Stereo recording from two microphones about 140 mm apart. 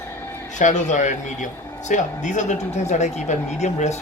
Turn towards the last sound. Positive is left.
turn(degrees=55)  # may be behind; listen again after turning